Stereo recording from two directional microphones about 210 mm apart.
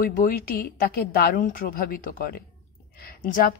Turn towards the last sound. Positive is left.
turn(degrees=45)  # may be behind; listen again after turning